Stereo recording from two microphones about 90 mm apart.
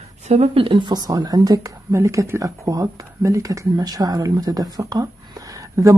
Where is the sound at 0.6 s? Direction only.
70° right (ahead or behind).